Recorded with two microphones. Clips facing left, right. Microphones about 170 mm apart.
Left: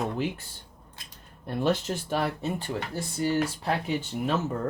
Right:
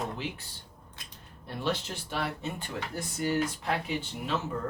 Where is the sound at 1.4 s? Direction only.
50° left (ahead or behind); by 3.7 s 30° left (ahead or behind).